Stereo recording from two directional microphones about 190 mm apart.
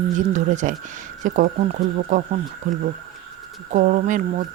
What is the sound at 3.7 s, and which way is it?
Speech, 40° right (ahead or behind).